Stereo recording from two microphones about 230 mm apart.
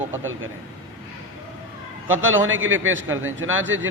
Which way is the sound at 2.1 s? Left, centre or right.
Right.